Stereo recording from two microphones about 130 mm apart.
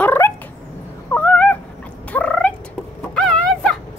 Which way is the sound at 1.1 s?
10° left (ahead or behind).